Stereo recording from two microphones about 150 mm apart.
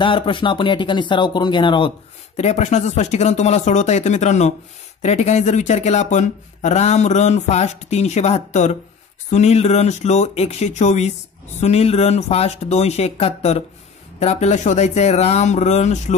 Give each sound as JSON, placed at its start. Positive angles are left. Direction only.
{"t": 0.0, "sound": "speech", "side_deg": 35}
{"t": 2.3, "sound": "speech", "side_deg": 50}